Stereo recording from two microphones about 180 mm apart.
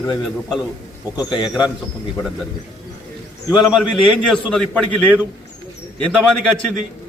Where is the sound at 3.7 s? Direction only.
Centre (ahead or behind).